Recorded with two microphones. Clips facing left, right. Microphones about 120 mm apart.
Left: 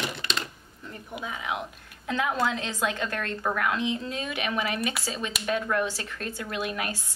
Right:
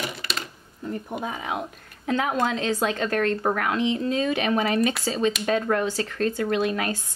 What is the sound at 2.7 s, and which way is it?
A woman's voice, 35° right (ahead or behind).